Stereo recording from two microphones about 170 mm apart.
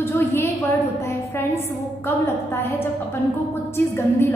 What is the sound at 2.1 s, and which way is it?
A woman's voice, 15° left (ahead or behind).